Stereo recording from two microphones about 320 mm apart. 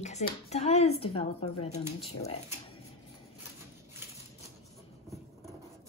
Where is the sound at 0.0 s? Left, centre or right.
Left.